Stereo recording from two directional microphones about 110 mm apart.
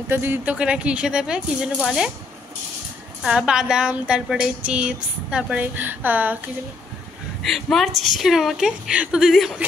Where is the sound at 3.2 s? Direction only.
10° right (ahead or behind).